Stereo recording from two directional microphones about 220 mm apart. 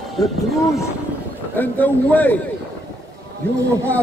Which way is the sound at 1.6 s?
10° left (ahead or behind).